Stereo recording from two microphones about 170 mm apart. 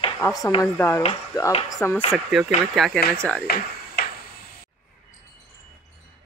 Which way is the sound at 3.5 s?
70° left (ahead or behind).